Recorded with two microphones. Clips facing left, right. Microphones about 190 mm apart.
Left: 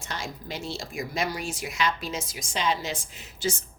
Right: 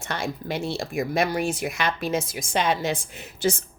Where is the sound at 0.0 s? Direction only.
60° right (ahead or behind).